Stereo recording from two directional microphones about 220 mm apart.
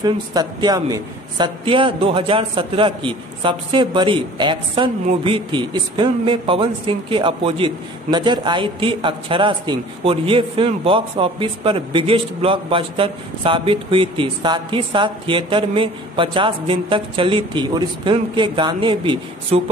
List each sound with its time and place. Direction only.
0.0 s a man's voice: 20° right (ahead or behind)